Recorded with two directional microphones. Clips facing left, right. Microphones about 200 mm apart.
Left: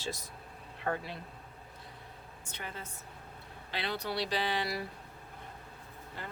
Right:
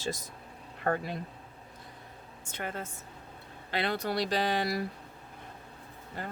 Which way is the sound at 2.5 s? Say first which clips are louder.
Right 7 dB; 50° right (ahead or behind).